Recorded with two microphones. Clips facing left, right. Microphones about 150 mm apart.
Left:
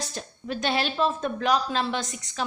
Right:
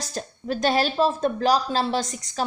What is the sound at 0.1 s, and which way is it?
Speech, 40° right (ahead or behind).